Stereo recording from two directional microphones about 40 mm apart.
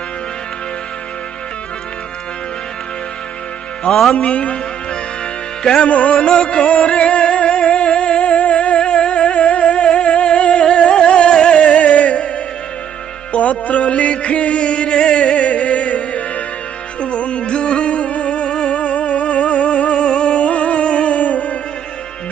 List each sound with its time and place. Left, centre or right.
4.1 s a man's voice: left
5.6 s music: centre
5.9 s music: left
6.1 s music: left
13.3 s a sound: left
17.0 s music: left